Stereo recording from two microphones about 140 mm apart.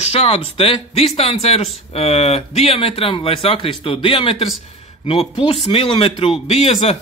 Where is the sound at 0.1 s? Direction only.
45° left (ahead or behind).